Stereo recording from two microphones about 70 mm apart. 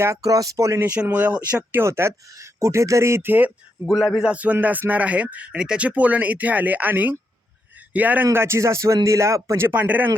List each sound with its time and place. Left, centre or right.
0.2 s speech: right
0.8 s speech: right
1.8 s speech: right
3.8 s a man's voice: centre
4.3 s speech: right
8.3 s a man's voice: right
9.7 s speech: right